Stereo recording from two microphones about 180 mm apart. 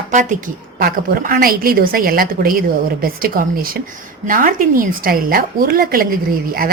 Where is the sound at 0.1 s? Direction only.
45° right (ahead or behind).